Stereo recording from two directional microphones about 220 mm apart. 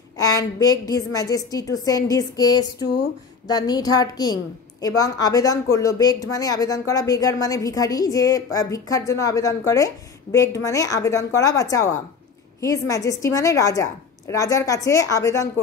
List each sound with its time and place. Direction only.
0.2 s speech: 15° left (ahead or behind)